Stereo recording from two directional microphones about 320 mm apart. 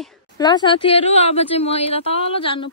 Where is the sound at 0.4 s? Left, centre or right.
Centre.